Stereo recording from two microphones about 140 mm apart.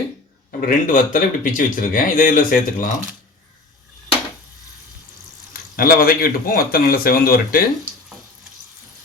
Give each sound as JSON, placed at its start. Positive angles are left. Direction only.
{"t": 0.6, "sound": "speech", "side_deg": 75}
{"t": 5.7, "sound": "speech", "side_deg": 90}